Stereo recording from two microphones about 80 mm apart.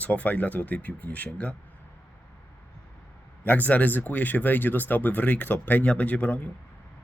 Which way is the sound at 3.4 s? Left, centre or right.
Left.